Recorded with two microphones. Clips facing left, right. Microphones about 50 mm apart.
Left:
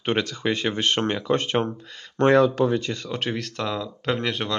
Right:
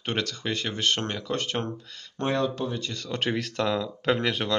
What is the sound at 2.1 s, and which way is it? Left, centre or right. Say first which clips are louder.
Speech: left 9 dB; left.